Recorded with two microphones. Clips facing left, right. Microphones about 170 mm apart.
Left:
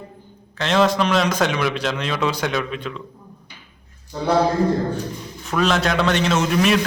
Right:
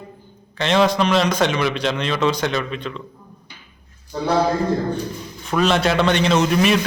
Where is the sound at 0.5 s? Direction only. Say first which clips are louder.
Right 1 dB; centre (ahead or behind).